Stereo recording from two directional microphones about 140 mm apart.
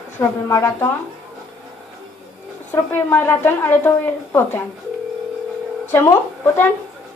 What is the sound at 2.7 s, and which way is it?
A woman's voice, 15° left (ahead or behind).